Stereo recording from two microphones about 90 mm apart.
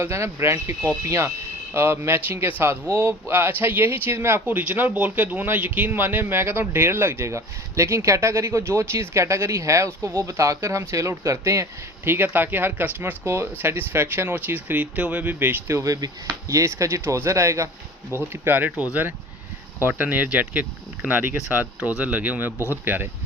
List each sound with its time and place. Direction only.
0.0 s a man's voice: 30° right (ahead or behind)
19.9 s a man's voice: 15° right (ahead or behind)